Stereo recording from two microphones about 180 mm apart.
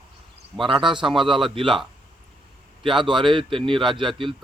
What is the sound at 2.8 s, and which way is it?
Speech, 25° right (ahead or behind).